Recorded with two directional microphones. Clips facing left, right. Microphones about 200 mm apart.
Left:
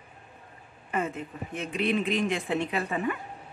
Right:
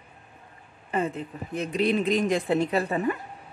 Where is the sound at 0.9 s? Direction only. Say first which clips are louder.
Right 3 dB; 35° right (ahead or behind).